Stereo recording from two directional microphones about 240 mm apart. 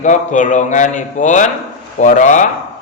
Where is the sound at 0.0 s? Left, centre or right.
Left.